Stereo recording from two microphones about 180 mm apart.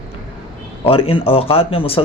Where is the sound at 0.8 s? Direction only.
30° left (ahead or behind).